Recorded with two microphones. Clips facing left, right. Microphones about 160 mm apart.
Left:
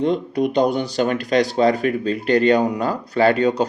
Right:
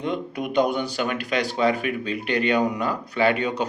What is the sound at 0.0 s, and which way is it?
Speech, 35° left (ahead or behind).